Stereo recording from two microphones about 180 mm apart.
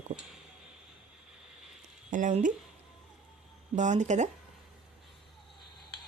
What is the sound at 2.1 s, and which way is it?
Speech, 45° right (ahead or behind).